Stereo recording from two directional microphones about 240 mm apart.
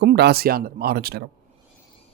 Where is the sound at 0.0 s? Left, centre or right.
Right.